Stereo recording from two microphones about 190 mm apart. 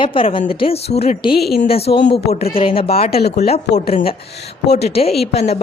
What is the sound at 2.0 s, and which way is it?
Speech, 65° left (ahead or behind).